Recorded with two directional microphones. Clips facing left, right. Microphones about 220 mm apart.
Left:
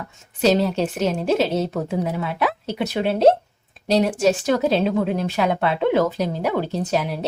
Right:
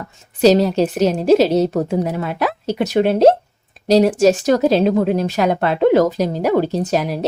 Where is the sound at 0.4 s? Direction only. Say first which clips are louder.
Right 6 dB; 40° right (ahead or behind).